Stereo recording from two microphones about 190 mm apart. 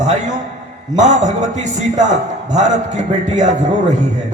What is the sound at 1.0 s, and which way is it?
A man's voice, 40° right (ahead or behind).